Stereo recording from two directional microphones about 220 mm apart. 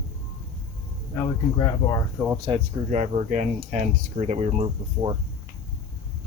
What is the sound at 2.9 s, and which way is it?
Speech, 35° right (ahead or behind).